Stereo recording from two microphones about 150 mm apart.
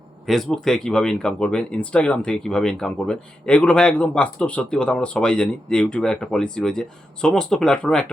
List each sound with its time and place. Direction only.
0.3 s speech: centre (ahead or behind)